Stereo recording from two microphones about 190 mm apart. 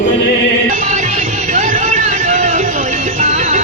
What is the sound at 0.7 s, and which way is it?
Music, 40° right (ahead or behind).